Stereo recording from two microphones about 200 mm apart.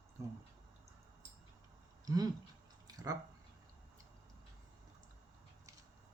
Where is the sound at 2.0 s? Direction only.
20° right (ahead or behind).